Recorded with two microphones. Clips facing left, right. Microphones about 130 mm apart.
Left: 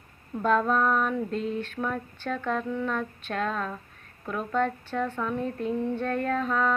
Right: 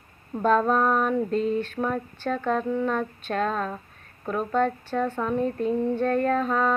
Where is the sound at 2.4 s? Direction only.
30° right (ahead or behind).